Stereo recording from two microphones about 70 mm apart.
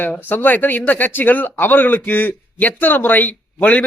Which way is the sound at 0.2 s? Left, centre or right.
Left.